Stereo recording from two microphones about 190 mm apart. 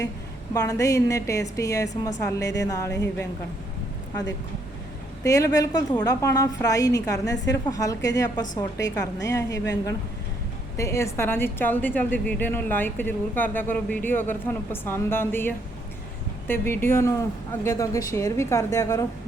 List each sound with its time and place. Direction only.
0.5 s a woman's voice: 15° left (ahead or behind)
5.2 s a woman's voice: 15° left (ahead or behind)